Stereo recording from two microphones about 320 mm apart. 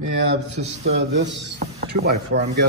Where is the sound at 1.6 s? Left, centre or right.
Right.